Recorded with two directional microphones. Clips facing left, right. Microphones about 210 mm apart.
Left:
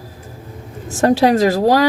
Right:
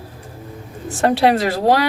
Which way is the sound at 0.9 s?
40° left (ahead or behind).